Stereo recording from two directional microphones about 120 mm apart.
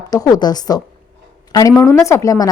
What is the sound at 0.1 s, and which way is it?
Speech, 30° left (ahead or behind).